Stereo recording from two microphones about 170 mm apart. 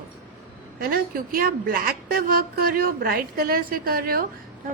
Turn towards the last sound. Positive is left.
turn(degrees=-60)  # may be behind; listen again after turning